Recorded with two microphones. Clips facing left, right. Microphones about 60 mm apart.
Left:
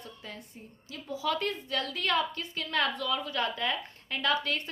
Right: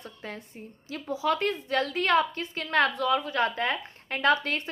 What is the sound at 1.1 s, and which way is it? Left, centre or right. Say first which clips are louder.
A woman's voice: right 4 dB; right.